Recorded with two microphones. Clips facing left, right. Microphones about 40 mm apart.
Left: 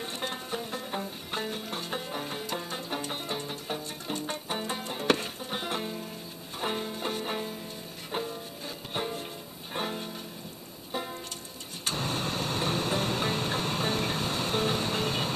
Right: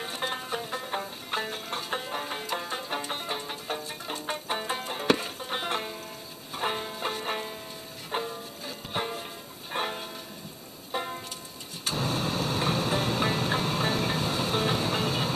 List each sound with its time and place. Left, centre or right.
0.0 s music: centre
5.0 s music: centre
5.4 s music: centre
11.8 s vehicle: centre